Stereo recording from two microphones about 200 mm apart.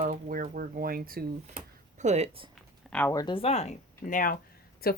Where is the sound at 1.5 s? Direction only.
35° right (ahead or behind).